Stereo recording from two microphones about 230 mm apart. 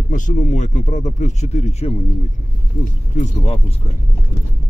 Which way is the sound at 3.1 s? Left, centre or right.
Left.